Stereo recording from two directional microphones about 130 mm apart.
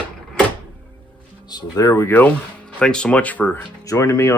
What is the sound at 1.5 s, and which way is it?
Speech, 30° left (ahead or behind).